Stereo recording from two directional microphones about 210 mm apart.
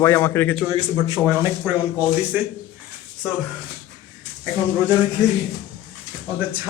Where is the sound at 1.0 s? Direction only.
15° right (ahead or behind).